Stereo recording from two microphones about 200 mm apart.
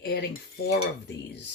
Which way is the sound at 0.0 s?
55° left (ahead or behind).